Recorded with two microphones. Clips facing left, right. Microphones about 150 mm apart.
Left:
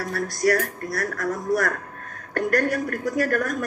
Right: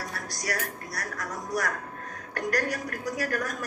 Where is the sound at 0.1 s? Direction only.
55° left (ahead or behind).